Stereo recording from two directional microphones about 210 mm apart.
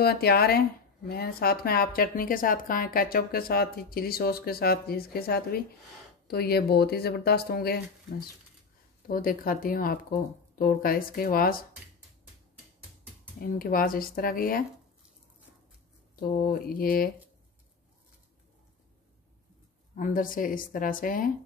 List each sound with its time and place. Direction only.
0.0 s speech: 50° left (ahead or behind)
9.0 s speech: 45° left (ahead or behind)
13.4 s speech: 45° left (ahead or behind)
16.2 s speech: 45° left (ahead or behind)
20.0 s speech: 40° left (ahead or behind)